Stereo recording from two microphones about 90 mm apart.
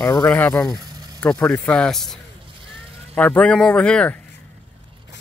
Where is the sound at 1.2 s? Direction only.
15° left (ahead or behind).